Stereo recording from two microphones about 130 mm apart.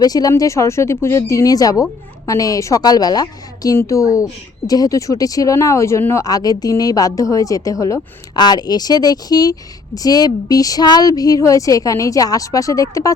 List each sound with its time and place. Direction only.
0.0 s a woman's voice: 30° left (ahead or behind)